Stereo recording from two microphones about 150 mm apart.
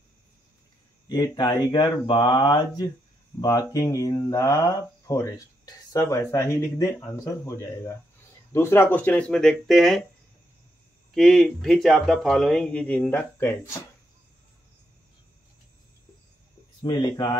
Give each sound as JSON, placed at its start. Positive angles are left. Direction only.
{"t": 1.0, "sound": "speech", "side_deg": 25}
{"t": 11.1, "sound": "speech", "side_deg": 0}
{"t": 16.8, "sound": "speech", "side_deg": 25}